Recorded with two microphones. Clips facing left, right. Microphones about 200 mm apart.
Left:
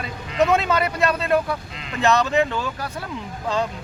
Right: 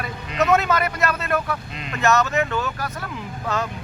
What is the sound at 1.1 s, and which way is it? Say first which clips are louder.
Speech: left 3 dB; 30° left (ahead or behind).